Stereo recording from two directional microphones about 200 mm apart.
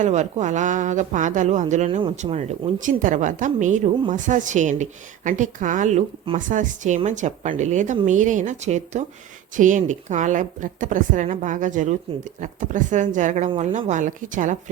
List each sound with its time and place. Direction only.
0.0 s a woman's voice: 35° right (ahead or behind)